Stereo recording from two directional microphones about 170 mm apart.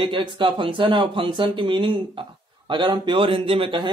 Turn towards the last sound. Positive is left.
turn(degrees=-30)  # may be behind; listen again after turning